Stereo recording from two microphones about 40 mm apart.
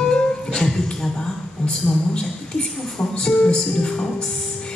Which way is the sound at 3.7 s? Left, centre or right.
Left.